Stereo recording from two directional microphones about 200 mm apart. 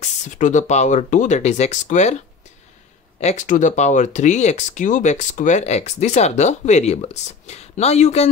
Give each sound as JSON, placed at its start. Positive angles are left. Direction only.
{"t": 0.0, "sound": "speech", "side_deg": 40}
{"t": 3.2, "sound": "speech", "side_deg": 35}